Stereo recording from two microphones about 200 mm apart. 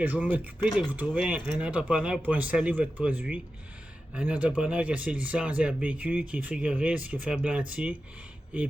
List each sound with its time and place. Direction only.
0.0 s speech: 5° right (ahead or behind)